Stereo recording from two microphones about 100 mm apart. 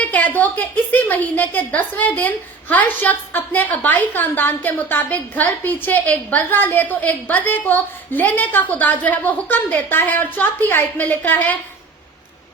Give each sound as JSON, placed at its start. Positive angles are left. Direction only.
{"t": 0.0, "sound": "a woman's voice", "side_deg": 15}